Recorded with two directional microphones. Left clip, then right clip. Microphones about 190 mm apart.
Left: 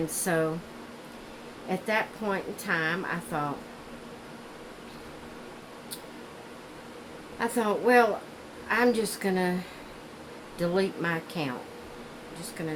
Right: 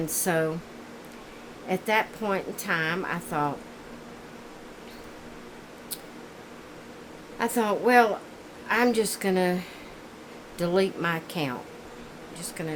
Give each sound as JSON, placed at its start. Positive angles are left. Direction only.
{"t": 0.1, "sound": "a woman's voice", "side_deg": -45}
{"t": 1.7, "sound": "a woman's voice", "side_deg": -45}
{"t": 7.3, "sound": "a woman's voice", "side_deg": -45}
{"t": 10.6, "sound": "a woman's voice", "side_deg": -50}